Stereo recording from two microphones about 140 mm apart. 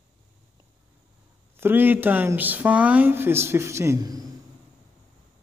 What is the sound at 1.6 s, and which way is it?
Speech, 15° right (ahead or behind).